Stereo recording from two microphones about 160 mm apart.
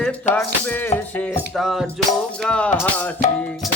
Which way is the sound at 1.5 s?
Centre (ahead or behind).